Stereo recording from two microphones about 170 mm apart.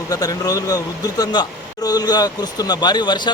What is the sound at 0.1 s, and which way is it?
A man's voice, 20° left (ahead or behind).